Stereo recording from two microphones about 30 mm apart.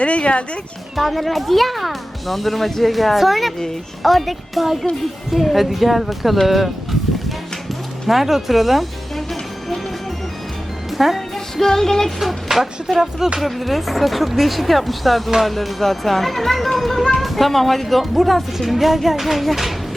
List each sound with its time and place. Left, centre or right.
0.0 s speech: left
0.9 s a child's voice: centre
8.0 s music: centre
10.9 s speech: centre
11.5 s speech: centre
12.2 s speech: centre
13.0 s music: centre
13.4 s a child's voice: centre